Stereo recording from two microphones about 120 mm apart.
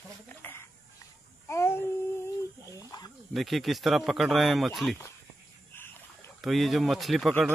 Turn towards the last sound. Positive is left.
turn(degrees=0)  # may be behind; listen again after turning